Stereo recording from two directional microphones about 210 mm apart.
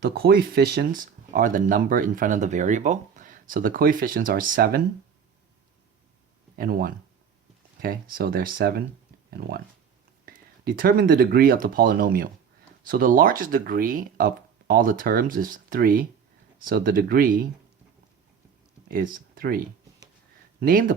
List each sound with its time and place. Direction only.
0.1 s speech: 45° right (ahead or behind)
6.6 s speech: 45° right (ahead or behind)
10.2 s speech: 45° right (ahead or behind)
18.9 s speech: 40° right (ahead or behind)